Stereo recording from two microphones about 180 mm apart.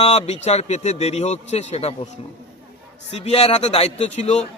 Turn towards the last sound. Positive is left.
turn(degrees=35)  # may be behind; listen again after turning